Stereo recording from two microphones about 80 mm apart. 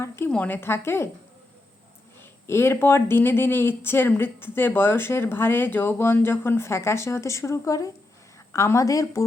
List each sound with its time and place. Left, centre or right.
0.3 s speech: centre
2.5 s a woman's voice: left